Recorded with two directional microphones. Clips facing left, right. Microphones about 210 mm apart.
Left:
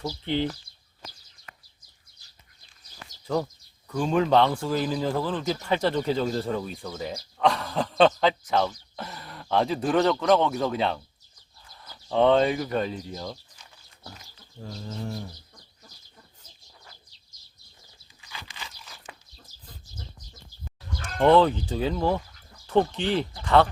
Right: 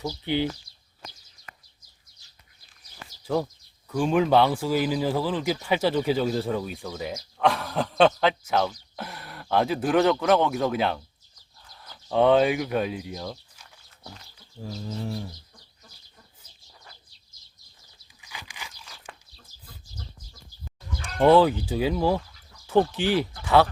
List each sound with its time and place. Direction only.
0.0 s speech: 5° right (ahead or behind)
3.2 s speech: 5° right (ahead or behind)
14.6 s speech: 5° right (ahead or behind)
18.2 s a sound: 15° right (ahead or behind)
18.8 s a sound: 5° left (ahead or behind)
21.0 s speech: 10° right (ahead or behind)